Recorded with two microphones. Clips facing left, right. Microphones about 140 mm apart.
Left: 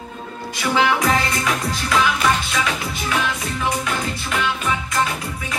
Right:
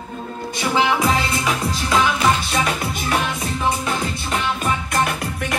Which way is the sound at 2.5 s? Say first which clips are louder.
Right 2 dB; 40° right (ahead or behind).